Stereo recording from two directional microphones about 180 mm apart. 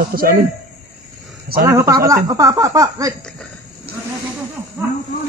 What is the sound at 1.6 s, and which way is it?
Speech, 15° right (ahead or behind).